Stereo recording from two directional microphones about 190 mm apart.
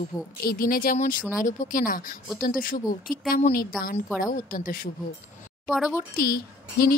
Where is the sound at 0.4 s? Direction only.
50° left (ahead or behind).